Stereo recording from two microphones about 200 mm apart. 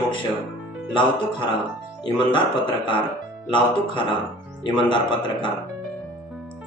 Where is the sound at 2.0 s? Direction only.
25° left (ahead or behind).